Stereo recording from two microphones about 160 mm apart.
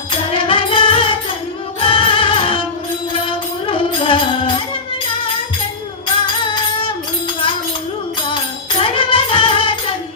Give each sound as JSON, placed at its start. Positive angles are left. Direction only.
{"t": 0.3, "sound": "music", "side_deg": 30}
{"t": 8.8, "sound": "music", "side_deg": 30}